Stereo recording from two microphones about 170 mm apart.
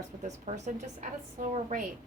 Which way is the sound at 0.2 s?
45° right (ahead or behind).